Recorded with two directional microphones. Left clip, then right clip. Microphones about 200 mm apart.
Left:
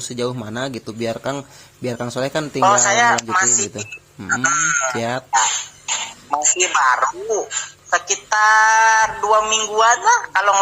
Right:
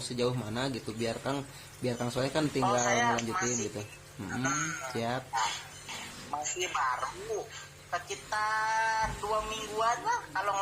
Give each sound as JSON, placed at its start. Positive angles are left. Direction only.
{"t": 0.2, "sound": "a man's voice", "side_deg": 40}